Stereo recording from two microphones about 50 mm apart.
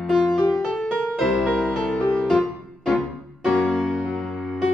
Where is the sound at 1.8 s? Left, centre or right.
Left.